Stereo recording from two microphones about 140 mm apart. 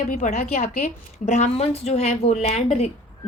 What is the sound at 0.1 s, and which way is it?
A woman's voice, 70° left (ahead or behind).